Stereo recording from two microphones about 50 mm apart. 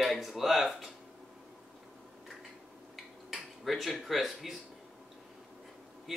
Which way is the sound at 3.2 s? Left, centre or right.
Centre.